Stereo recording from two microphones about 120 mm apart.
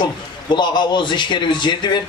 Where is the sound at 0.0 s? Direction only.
40° left (ahead or behind).